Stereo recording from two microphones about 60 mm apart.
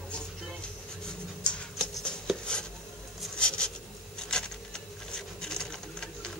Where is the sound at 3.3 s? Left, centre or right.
Centre.